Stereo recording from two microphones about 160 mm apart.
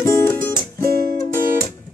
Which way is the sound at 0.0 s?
10° left (ahead or behind).